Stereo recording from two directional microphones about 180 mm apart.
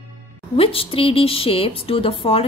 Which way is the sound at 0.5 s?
30° left (ahead or behind).